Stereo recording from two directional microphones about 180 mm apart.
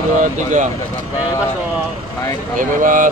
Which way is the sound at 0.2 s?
45° right (ahead or behind).